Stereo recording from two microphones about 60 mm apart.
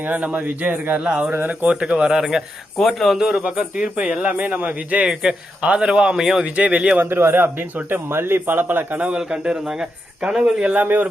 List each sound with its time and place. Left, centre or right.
0.1 s a man's voice: right
1.2 s a man's voice: right
1.7 s speech: centre
2.7 s speech: centre
3.2 s a man's voice: centre
6.4 s a man's voice: right
7.0 s a man's voice: right
9.1 s a man's voice: centre
10.8 s a man's voice: right